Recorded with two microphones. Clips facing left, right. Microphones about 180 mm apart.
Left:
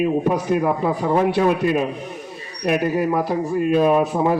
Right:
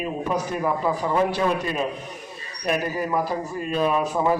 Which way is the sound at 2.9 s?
65° left (ahead or behind).